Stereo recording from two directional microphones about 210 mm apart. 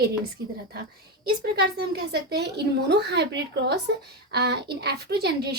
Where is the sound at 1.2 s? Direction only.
50° right (ahead or behind).